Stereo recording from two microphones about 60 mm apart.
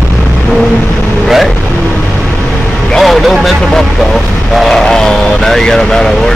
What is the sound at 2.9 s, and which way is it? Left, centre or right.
Vehicle, centre.